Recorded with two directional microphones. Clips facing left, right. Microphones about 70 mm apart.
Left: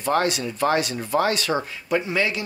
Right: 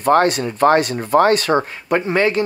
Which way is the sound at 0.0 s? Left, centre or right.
Right.